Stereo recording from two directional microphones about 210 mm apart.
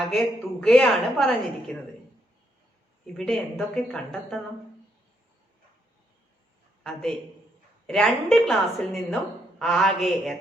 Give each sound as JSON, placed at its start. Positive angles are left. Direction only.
{"t": 0.0, "sound": "a woman's voice", "side_deg": 0}
{"t": 3.2, "sound": "a woman's voice", "side_deg": 5}
{"t": 6.8, "sound": "a woman's voice", "side_deg": 5}